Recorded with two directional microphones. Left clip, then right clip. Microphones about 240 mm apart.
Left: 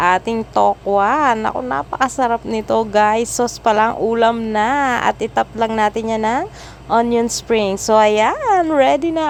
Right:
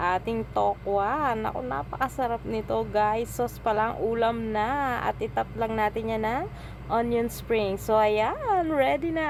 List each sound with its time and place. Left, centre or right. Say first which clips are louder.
0.0 s speech: left 11 dB; left